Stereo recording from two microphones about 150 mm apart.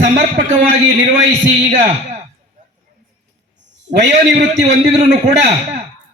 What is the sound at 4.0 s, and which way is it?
A man's voice, 50° right (ahead or behind).